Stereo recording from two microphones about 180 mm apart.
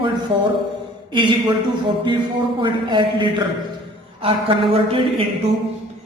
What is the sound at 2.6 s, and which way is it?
A man's voice, 25° right (ahead or behind).